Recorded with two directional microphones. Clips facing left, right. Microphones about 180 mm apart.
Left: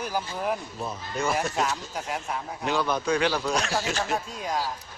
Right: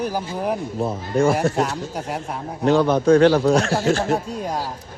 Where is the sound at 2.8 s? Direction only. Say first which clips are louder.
Right 8 dB; 25° right (ahead or behind).